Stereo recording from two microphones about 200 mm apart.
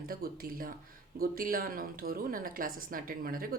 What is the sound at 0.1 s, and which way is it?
Speech, 45° right (ahead or behind).